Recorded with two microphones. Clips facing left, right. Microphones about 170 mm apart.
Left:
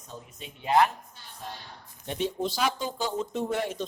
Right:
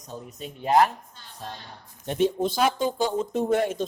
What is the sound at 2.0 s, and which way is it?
Speech, 50° right (ahead or behind).